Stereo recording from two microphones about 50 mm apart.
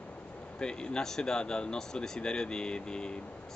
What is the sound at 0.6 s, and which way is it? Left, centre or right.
Speech, centre.